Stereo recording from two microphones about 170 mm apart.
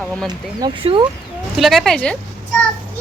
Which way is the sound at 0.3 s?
25° right (ahead or behind).